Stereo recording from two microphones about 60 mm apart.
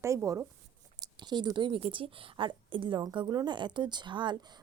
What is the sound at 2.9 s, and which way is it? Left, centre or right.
Speech, right.